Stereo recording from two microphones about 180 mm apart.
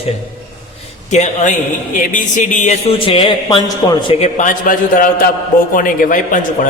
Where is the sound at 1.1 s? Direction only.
40° left (ahead or behind); by 3.9 s 25° left (ahead or behind).